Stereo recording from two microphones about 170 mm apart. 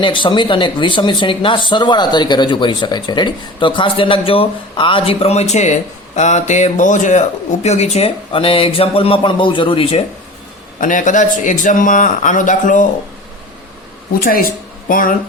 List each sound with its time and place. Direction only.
0.0 s speech: 30° left (ahead or behind)
10.8 s speech: 50° left (ahead or behind)
14.8 s speech: 55° left (ahead or behind)